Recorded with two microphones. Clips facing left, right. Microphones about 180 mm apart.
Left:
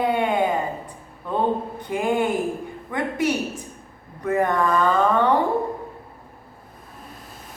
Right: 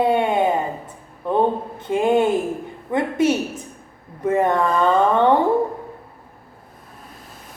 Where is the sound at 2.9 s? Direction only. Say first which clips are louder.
Right 5 dB; 25° right (ahead or behind).